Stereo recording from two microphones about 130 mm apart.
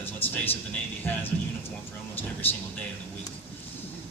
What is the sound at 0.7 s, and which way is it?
Speech, 15° left (ahead or behind).